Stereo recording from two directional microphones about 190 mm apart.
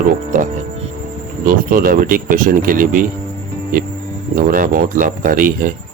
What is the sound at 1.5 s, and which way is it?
Speech, 45° right (ahead or behind).